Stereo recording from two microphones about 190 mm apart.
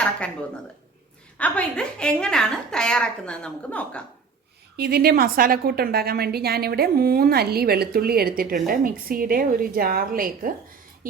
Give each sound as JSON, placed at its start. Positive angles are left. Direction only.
{"t": 1.4, "sound": "a woman's voice", "side_deg": 5}
{"t": 4.8, "sound": "a woman's voice", "side_deg": -55}